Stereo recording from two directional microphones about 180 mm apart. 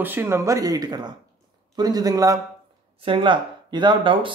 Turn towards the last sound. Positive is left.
turn(degrees=-25)  # may be behind; listen again after turning